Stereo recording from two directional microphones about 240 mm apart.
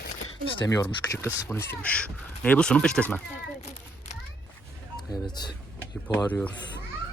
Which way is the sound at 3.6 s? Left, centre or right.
Left.